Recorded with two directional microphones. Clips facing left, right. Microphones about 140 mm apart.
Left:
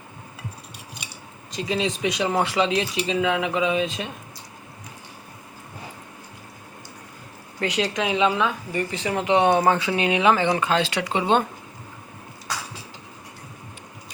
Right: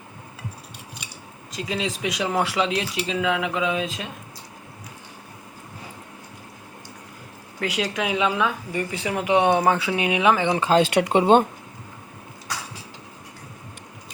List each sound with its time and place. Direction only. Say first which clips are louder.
1.5 s speech: left 3 dB; centre (ahead or behind)
7.6 s a woman's voice: left 1 dB; 5° right (ahead or behind)
10.6 s speech: right 4 dB; 35° right (ahead or behind)
10.8 s speech: right 5 dB; 55° right (ahead or behind)